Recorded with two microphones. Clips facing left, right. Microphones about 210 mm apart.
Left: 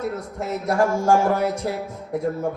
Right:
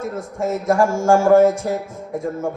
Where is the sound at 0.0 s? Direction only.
45° right (ahead or behind).